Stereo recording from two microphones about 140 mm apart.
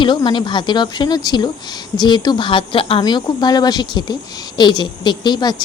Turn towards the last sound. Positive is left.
turn(degrees=30)  # may be behind; listen again after turning